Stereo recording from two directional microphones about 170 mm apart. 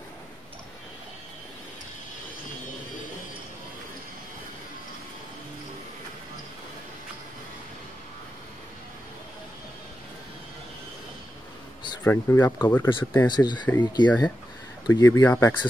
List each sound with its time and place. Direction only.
12.0 s speech: 15° left (ahead or behind)
13.7 s speech: 25° left (ahead or behind)